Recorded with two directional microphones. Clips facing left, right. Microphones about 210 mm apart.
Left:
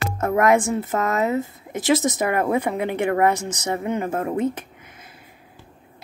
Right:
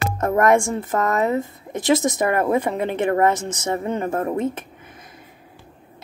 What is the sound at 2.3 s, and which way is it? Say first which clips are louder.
Speech: right 2 dB; 15° left (ahead or behind).